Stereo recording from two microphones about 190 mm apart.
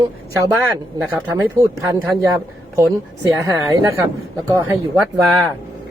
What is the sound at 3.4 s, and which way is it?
Speech, 15° right (ahead or behind).